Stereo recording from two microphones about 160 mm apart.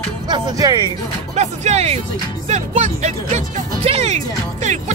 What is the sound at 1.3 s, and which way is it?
Speech, 45° right (ahead or behind).